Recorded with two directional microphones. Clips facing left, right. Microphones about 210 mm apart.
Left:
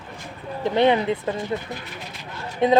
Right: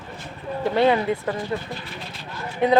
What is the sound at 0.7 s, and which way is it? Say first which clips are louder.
Speech: left 1 dB; 20° left (ahead or behind).